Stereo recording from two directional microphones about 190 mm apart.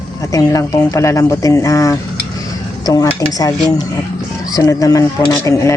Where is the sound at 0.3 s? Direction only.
15° left (ahead or behind).